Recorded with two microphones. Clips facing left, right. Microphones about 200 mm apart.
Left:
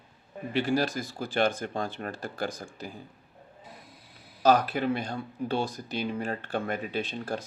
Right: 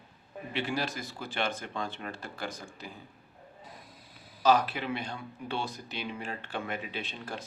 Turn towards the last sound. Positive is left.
turn(degrees=35)  # may be behind; listen again after turning